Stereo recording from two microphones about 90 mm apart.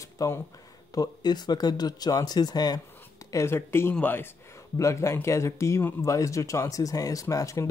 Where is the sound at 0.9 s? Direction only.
45° left (ahead or behind).